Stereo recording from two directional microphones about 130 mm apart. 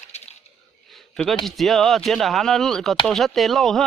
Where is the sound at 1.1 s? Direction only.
Centre (ahead or behind).